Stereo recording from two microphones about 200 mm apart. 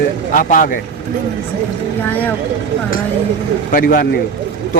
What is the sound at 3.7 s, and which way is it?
Speech, 45° left (ahead or behind).